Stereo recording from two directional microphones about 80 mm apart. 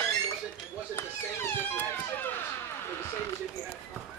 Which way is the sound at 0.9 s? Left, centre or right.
Left.